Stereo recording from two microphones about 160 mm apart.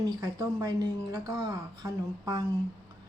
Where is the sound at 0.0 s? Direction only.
25° right (ahead or behind).